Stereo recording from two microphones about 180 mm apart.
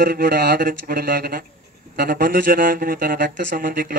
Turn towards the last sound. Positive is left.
turn(degrees=-55)  # may be behind; listen again after turning